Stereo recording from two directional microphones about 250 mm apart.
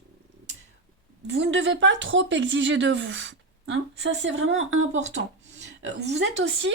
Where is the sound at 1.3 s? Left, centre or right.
Right.